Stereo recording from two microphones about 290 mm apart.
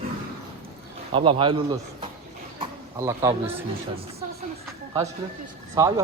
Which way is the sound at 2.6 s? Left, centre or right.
Centre.